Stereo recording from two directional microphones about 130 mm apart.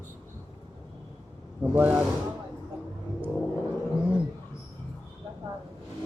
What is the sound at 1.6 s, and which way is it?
Speech, 10° right (ahead or behind).